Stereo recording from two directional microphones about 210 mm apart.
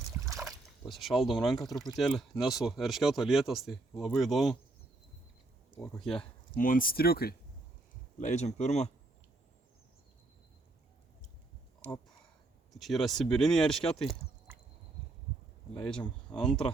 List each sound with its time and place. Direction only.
0.4 s a sound: centre (ahead or behind)
1.4 s speech: centre (ahead or behind)
5.8 s speech: centre (ahead or behind)
6.6 s speech: 40° left (ahead or behind)
8.2 s speech: 35° left (ahead or behind)
12.7 s speech: centre (ahead or behind)
15.8 s speech: 5° left (ahead or behind)
16.5 s speech: 25° left (ahead or behind)